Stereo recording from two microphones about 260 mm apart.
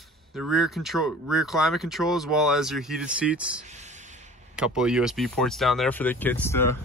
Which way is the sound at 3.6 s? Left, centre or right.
Right.